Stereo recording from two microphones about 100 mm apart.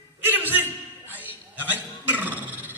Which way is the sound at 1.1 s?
20° right (ahead or behind).